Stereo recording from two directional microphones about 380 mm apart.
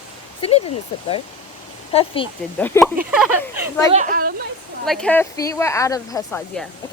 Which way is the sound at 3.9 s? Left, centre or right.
Centre.